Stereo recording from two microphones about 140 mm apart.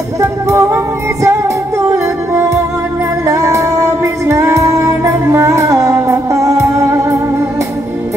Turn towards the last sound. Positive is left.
turn(degrees=-20)  # may be behind; listen again after turning